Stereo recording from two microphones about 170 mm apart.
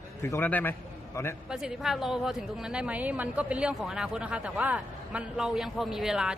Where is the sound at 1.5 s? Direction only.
5° right (ahead or behind).